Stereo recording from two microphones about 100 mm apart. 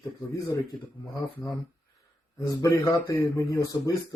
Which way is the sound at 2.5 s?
30° left (ahead or behind).